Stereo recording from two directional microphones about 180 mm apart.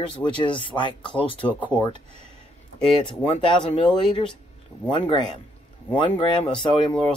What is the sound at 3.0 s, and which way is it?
Speech, 25° left (ahead or behind).